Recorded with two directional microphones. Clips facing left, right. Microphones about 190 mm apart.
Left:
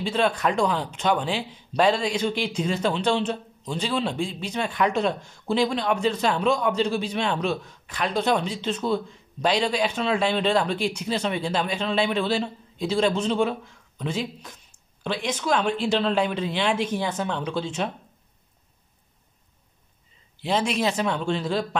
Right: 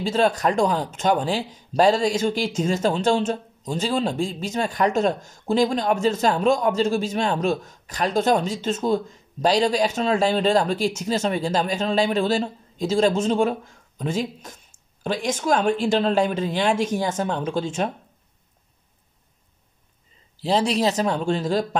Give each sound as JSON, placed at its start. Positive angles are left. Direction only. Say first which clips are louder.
{"t": 0.0, "sound": "a man's voice", "louder": "right 3 dB", "side_deg": -40}
{"t": 20.3, "sound": "speech", "louder": "right 3 dB", "side_deg": -35}